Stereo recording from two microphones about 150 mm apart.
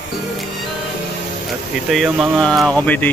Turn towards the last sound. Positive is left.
turn(degrees=10)  # may be behind; listen again after turning